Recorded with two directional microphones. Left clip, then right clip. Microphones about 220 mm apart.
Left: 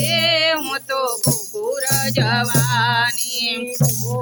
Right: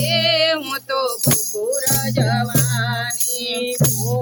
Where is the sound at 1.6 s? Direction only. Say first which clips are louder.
Left 2 dB; 15° left (ahead or behind).